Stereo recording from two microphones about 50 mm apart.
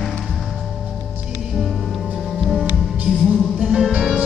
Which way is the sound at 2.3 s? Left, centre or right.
Centre.